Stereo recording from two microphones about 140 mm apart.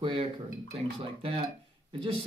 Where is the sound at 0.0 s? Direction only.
35° right (ahead or behind).